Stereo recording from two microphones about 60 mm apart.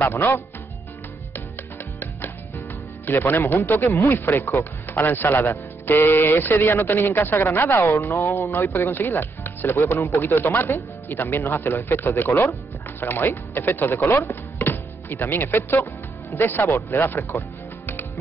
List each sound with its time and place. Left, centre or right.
0.0 s speech: left
3.1 s speech: left
12.3 s speech: left
13.0 s speech: left